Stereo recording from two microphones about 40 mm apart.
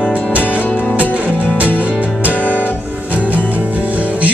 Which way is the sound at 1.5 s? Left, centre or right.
Right.